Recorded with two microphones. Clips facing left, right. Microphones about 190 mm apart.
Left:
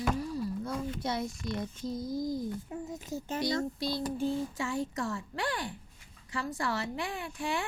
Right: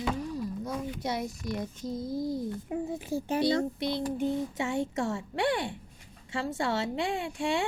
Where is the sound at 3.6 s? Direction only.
20° right (ahead or behind).